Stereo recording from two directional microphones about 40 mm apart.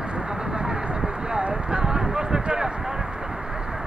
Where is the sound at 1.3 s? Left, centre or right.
Centre.